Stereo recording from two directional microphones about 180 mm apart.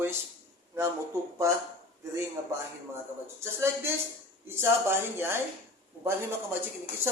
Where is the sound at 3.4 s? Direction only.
15° right (ahead or behind).